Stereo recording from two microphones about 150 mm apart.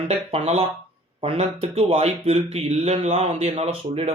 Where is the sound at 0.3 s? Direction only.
40° right (ahead or behind).